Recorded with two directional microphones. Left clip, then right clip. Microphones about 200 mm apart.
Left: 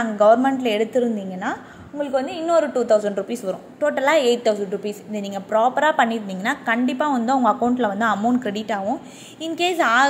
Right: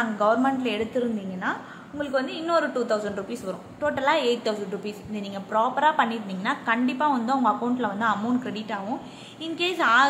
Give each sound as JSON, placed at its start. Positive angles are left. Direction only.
{"t": 0.0, "sound": "speech", "side_deg": 20}